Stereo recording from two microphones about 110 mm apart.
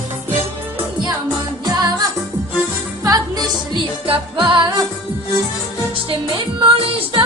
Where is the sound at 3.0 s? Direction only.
35° right (ahead or behind).